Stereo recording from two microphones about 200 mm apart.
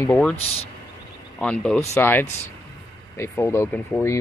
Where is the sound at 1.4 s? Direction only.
5° left (ahead or behind).